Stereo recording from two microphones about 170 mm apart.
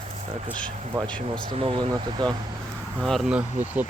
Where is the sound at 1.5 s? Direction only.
30° right (ahead or behind).